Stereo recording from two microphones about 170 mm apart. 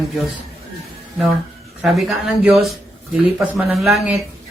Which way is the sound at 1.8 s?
Centre (ahead or behind).